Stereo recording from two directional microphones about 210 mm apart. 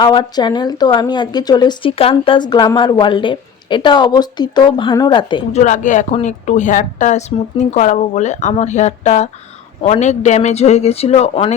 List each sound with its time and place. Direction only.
0.0 s speech: 20° left (ahead or behind)
5.6 s speech: 35° left (ahead or behind)